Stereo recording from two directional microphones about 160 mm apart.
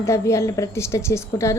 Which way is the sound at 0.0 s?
20° left (ahead or behind).